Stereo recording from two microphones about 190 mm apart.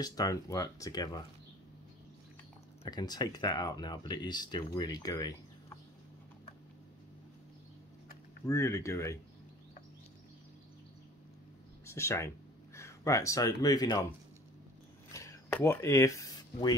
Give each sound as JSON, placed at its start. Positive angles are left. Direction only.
{"t": 0.0, "sound": "speech", "side_deg": 20}
{"t": 2.8, "sound": "speech", "side_deg": 20}
{"t": 8.5, "sound": "speech", "side_deg": 15}
{"t": 11.8, "sound": "speech", "side_deg": 15}
{"t": 15.1, "sound": "a sound", "side_deg": 15}